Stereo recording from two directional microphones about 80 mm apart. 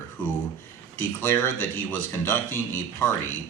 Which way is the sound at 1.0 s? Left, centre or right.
Left.